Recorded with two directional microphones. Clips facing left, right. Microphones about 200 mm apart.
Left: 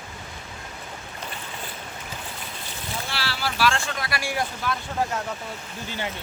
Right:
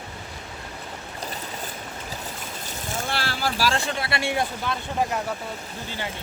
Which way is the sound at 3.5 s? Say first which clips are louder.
Left 2 dB; 35° right (ahead or behind).